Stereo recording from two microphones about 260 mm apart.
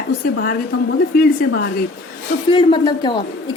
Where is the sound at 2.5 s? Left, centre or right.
Centre.